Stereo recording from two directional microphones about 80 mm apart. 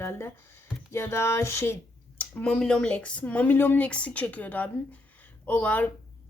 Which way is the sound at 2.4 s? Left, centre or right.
Centre.